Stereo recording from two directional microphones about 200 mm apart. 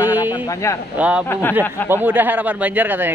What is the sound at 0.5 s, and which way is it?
Speech, 15° left (ahead or behind).